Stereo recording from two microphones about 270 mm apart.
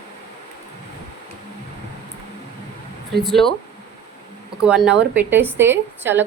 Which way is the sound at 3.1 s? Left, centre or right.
Centre.